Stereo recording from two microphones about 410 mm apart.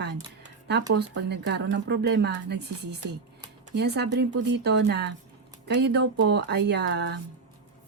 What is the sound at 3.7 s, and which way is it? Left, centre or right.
Speech, right.